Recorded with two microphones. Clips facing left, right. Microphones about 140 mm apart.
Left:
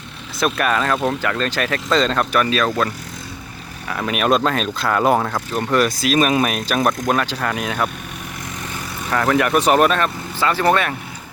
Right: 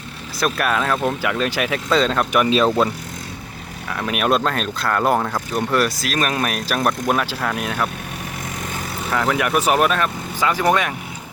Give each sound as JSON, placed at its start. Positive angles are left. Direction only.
{"t": 0.3, "sound": "speech", "side_deg": 0}
{"t": 2.3, "sound": "speech", "side_deg": -20}
{"t": 3.8, "sound": "speech", "side_deg": 0}
{"t": 9.0, "sound": "speech", "side_deg": -5}